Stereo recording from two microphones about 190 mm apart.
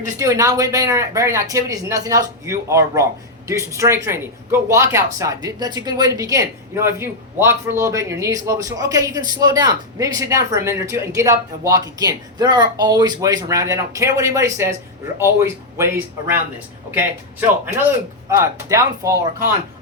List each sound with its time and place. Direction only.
0.2 s speech: 15° right (ahead or behind)